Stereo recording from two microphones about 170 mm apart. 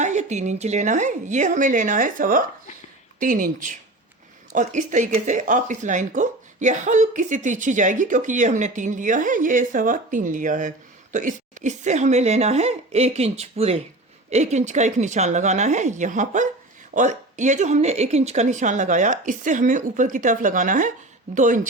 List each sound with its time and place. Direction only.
0.0 s a woman's voice: 45° right (ahead or behind)